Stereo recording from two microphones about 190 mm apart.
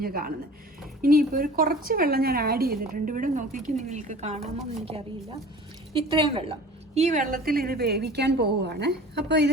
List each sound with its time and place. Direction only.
0.0 s a woman's voice: 50° right (ahead or behind)